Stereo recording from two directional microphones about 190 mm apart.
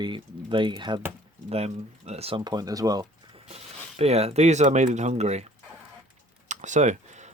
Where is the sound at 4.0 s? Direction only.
35° right (ahead or behind).